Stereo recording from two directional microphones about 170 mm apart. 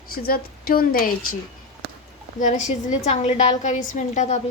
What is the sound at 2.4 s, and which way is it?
A woman's voice, 45° left (ahead or behind).